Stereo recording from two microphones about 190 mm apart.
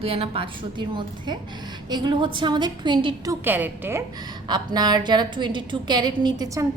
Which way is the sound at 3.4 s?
10° right (ahead or behind).